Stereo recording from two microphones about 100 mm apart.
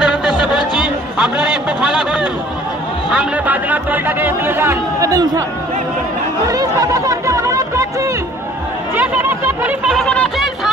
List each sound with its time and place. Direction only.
0.0 s music: 5° right (ahead or behind)
0.7 s a sound: 5° right (ahead or behind)
3.1 s speech: 15° right (ahead or behind)
5.1 s speech: 35° right (ahead or behind)
6.4 s chatter: 35° right (ahead or behind)
8.9 s snicker: 20° right (ahead or behind)
9.8 s a sound: centre (ahead or behind)